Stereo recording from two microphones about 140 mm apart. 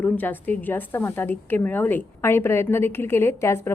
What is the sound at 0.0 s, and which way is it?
A woman's voice, 10° left (ahead or behind).